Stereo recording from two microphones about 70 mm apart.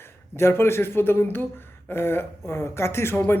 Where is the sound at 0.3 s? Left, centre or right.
Left.